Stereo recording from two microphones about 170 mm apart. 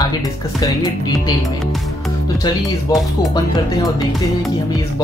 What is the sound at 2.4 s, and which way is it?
Speech, 25° left (ahead or behind).